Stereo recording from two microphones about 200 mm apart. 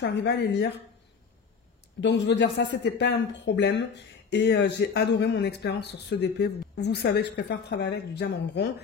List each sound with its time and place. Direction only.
0.0 s speech: 60° left (ahead or behind)
2.0 s speech: 65° left (ahead or behind)